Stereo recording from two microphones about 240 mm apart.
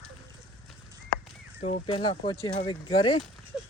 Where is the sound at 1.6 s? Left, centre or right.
Left.